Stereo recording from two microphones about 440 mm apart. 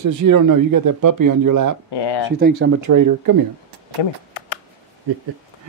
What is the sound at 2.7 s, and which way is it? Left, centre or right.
Speech, right.